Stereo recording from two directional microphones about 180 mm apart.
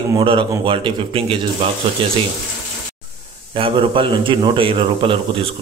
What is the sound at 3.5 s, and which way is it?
A man's voice, 30° right (ahead or behind).